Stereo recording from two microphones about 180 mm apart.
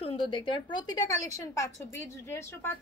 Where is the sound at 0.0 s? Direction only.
30° left (ahead or behind).